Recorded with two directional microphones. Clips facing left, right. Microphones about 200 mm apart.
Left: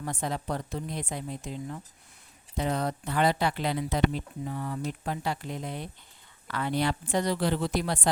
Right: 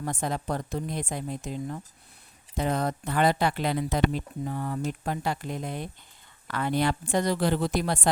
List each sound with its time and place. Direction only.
0.0 s speech: 45° right (ahead or behind)